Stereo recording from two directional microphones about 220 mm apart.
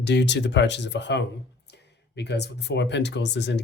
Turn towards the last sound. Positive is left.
turn(degrees=50)  # may be behind; listen again after turning